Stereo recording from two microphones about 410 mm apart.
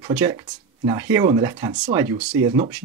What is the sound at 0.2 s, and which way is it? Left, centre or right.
Speech, centre.